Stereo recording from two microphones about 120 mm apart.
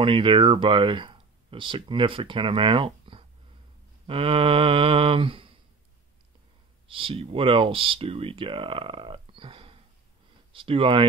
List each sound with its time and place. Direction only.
0.0 s speech: 45° right (ahead or behind)
6.9 s speech: 50° right (ahead or behind)